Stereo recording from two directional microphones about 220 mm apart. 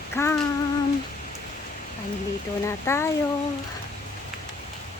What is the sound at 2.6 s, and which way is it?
Speech, 10° left (ahead or behind).